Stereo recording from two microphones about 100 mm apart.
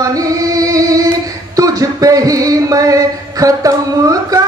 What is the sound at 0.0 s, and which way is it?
Music, 35° right (ahead or behind).